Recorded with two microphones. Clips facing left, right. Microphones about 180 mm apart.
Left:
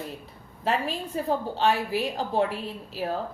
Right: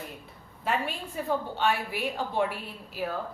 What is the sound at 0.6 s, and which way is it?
A woman's voice, 35° left (ahead or behind).